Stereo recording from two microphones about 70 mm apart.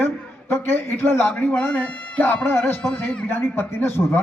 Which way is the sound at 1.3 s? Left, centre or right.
Centre.